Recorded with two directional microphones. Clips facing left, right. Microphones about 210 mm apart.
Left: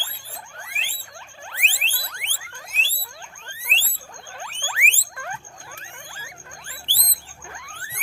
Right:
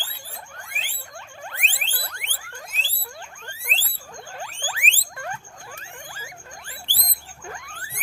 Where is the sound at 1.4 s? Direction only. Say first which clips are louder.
Left 1 dB; 50° right (ahead or behind).